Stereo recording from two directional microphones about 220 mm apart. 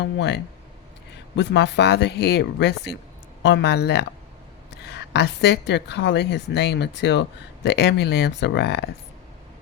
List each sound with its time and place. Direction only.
0.0 s a woman's voice: 50° left (ahead or behind)